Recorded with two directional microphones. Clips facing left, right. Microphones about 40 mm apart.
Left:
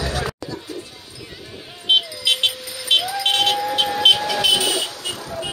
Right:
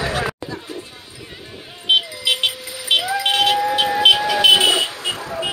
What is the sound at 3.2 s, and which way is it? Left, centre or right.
Music, centre.